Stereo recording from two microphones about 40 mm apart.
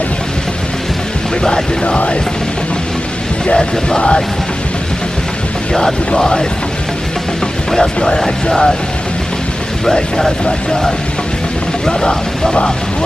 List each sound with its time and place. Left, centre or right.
1.4 s a sound: left
3.4 s a sound: left
5.7 s speech: centre
7.7 s speech: centre
9.8 s speech: centre
11.8 s speech: centre